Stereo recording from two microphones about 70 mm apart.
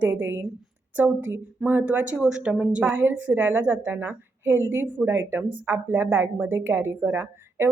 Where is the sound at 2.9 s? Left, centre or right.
Right.